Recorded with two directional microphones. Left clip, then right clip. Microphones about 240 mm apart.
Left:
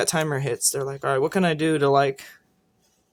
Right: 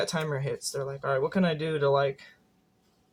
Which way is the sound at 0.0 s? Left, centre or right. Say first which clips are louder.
Left 6 dB; left.